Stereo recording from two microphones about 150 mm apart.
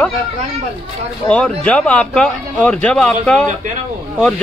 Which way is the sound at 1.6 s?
10° left (ahead or behind).